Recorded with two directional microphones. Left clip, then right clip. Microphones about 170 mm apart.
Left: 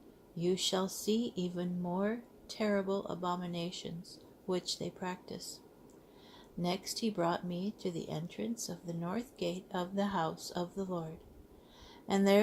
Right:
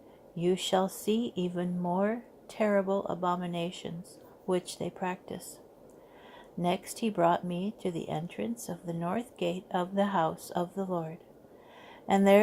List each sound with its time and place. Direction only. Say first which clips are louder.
0.3 s speech: right 5 dB; 40° right (ahead or behind)
6.6 s speech: right 5 dB; 40° right (ahead or behind)
12.0 s speech: right 6 dB; 40° right (ahead or behind)